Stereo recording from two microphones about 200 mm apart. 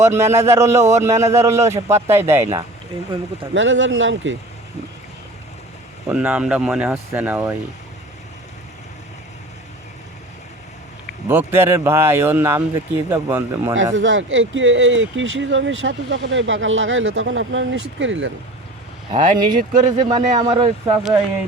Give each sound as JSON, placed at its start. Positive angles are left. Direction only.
{"t": 0.0, "sound": "a man's voice", "side_deg": -15}
{"t": 3.5, "sound": "speech", "side_deg": -70}
{"t": 6.1, "sound": "a man's voice", "side_deg": -5}
{"t": 11.3, "sound": "a man's voice", "side_deg": -10}
{"t": 13.9, "sound": "speech", "side_deg": -70}
{"t": 19.1, "sound": "speech", "side_deg": -40}
{"t": 19.8, "sound": "speech", "side_deg": -20}